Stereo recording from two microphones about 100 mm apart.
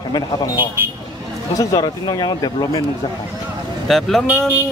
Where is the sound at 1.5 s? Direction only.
45° left (ahead or behind).